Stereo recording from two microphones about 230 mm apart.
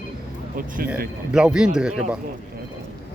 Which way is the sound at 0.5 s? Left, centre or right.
Right.